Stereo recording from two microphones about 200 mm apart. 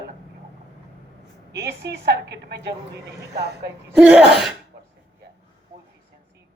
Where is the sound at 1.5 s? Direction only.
55° right (ahead or behind).